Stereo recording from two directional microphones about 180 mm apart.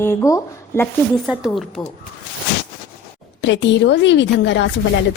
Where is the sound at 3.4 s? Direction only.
85° left.